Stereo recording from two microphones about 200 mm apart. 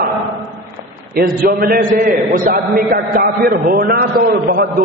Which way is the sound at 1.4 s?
50° right (ahead or behind).